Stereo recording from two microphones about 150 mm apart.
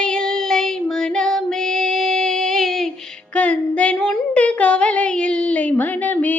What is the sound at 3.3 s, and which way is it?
Female singing, 10° left (ahead or behind).